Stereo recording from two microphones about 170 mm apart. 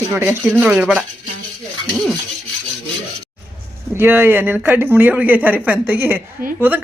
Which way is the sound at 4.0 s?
10° right (ahead or behind).